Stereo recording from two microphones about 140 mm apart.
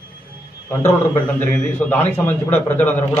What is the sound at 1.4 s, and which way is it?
A man's voice, 15° left (ahead or behind).